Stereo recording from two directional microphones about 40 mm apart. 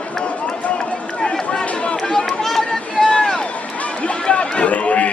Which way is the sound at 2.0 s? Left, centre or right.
Centre.